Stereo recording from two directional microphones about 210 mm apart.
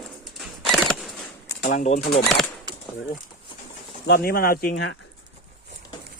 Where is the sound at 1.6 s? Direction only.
35° left (ahead or behind).